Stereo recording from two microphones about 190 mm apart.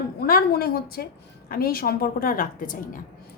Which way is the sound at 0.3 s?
50° left (ahead or behind).